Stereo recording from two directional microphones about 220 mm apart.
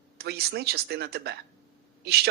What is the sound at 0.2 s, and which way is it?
A woman's voice, 45° right (ahead or behind).